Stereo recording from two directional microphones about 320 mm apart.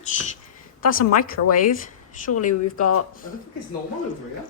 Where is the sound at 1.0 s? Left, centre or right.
Left.